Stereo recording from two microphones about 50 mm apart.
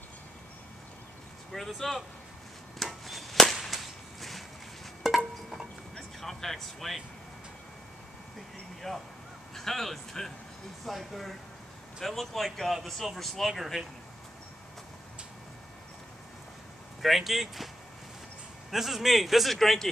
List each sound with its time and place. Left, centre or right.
1.5 s a man's voice: centre
2.8 s a sound: centre
5.9 s speech: centre
8.8 s a man's voice: centre
17.0 s a man's voice: centre
18.7 s a man's voice: centre